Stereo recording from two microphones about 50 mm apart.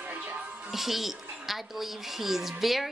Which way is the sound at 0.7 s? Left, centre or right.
Centre.